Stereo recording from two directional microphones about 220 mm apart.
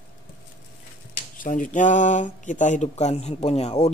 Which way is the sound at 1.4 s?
35° left (ahead or behind).